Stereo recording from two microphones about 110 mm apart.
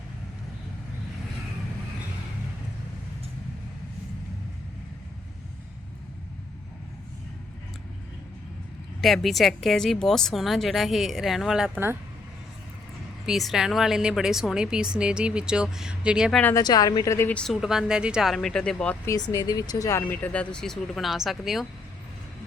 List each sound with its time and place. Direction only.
9.0 s a woman's voice: centre (ahead or behind)
13.2 s a woman's voice: 5° right (ahead or behind)
16.6 s speech: 35° left (ahead or behind)
17.2 s speech: 15° left (ahead or behind)
17.5 s a woman's voice: 5° right (ahead or behind)
18.3 s speech: 5° left (ahead or behind)
19.0 s speech: 35° left (ahead or behind)
20.2 s a woman's voice: 10° left (ahead or behind)